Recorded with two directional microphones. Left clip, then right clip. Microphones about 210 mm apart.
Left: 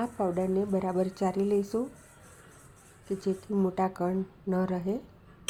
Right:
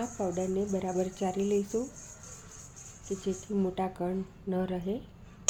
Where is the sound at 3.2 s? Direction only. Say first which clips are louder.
Left 3 dB; 15° left (ahead or behind).